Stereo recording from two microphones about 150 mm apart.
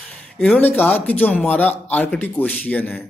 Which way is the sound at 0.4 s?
10° left (ahead or behind).